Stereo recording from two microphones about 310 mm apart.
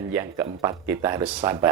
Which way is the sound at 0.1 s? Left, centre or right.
Centre.